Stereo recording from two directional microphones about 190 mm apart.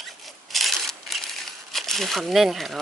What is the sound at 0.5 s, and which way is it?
Speech, centre (ahead or behind).